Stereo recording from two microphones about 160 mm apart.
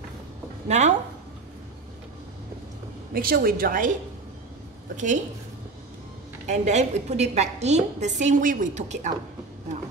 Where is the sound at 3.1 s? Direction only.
70° right (ahead or behind).